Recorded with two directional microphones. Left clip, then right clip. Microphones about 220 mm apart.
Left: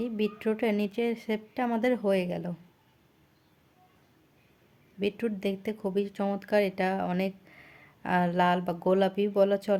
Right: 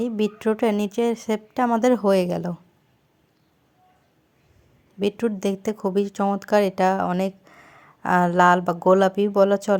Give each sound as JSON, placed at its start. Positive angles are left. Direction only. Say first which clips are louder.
{"t": 0.0, "sound": "speech", "louder": "right 7 dB", "side_deg": -15}
{"t": 4.9, "sound": "speech", "louder": "right 7 dB", "side_deg": -15}